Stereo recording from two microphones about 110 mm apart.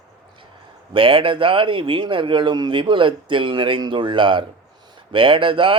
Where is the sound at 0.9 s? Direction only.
55° right (ahead or behind).